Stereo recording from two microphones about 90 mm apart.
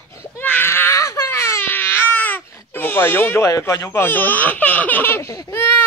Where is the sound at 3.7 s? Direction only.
30° left (ahead or behind).